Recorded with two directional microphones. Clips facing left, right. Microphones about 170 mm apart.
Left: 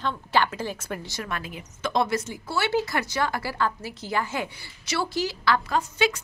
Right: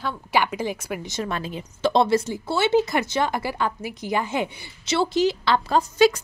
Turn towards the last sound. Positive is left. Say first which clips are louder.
# right 3 dB
turn(degrees=-25)  # may be behind; listen again after turning